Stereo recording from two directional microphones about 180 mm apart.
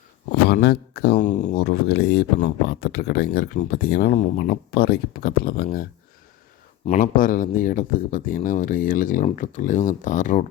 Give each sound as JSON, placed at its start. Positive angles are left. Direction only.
{"t": 0.4, "sound": "speech", "side_deg": 65}
{"t": 1.2, "sound": "speech", "side_deg": 45}
{"t": 1.5, "sound": "speech", "side_deg": 60}
{"t": 7.0, "sound": "speech", "side_deg": 50}